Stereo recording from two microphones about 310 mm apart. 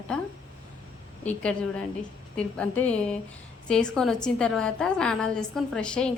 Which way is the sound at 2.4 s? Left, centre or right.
Centre.